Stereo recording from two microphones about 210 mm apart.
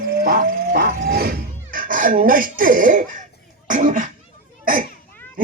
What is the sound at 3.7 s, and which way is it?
Cough, 40° right (ahead or behind).